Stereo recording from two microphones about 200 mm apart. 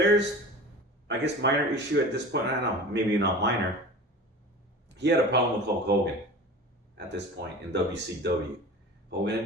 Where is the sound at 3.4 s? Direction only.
60° right (ahead or behind).